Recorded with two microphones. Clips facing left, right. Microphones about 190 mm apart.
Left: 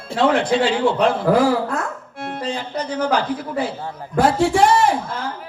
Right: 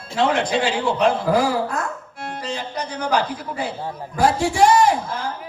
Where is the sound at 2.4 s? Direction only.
55° left (ahead or behind).